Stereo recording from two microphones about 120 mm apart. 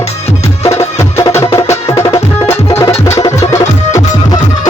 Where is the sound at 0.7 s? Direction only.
25° left (ahead or behind).